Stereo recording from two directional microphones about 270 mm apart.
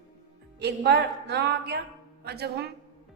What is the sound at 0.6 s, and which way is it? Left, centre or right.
A woman's voice, right.